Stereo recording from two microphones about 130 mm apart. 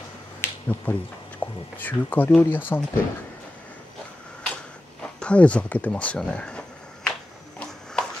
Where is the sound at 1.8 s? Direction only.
15° left (ahead or behind).